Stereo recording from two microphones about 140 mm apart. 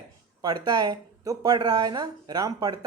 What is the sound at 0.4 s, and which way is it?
Speech, 30° right (ahead or behind).